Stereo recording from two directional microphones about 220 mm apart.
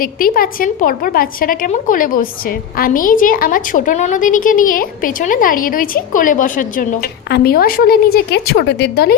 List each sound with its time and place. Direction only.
0.0 s a woman's voice: 40° left (ahead or behind)